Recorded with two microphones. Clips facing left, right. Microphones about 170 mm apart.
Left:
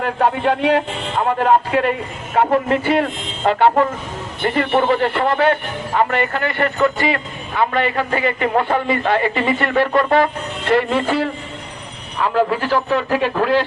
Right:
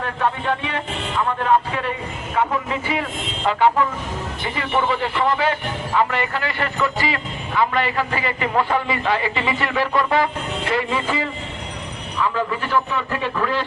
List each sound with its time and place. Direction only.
0.4 s a man's voice: 80° left